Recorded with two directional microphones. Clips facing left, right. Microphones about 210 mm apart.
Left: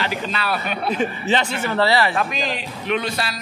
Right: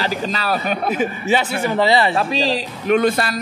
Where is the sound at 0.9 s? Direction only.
10° right (ahead or behind).